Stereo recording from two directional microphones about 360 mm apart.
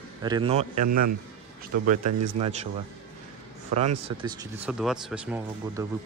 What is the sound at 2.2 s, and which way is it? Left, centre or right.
Speech, centre.